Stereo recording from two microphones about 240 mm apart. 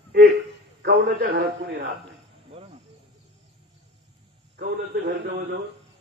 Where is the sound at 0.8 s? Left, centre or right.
Right.